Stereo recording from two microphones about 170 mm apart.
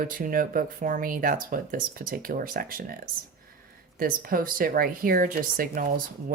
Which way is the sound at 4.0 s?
55° right (ahead or behind).